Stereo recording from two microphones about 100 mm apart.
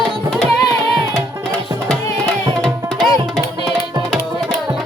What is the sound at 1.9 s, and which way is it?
Tabla, 5° left (ahead or behind).